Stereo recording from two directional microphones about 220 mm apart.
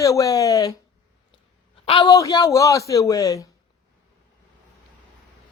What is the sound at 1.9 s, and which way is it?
A man's voice, 20° left (ahead or behind).